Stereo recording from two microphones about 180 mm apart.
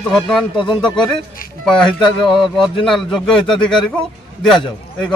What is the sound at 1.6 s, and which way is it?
Speech, 5° left (ahead or behind).